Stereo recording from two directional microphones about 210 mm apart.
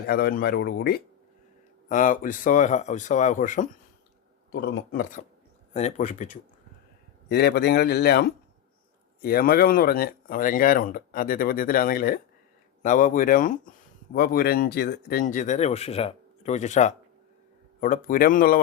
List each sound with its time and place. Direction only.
0.1 s speech: 45° left (ahead or behind)
1.9 s speech: 40° left (ahead or behind)
4.5 s speech: 65° left (ahead or behind)
4.9 s speech: 45° left (ahead or behind)
7.3 s speech: 50° left (ahead or behind)